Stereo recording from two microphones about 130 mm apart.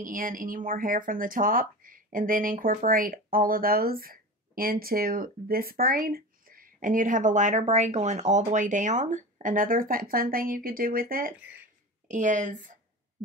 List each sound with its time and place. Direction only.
0.0 s a woman's voice: 90° right
12.1 s speech: 75° right (ahead or behind)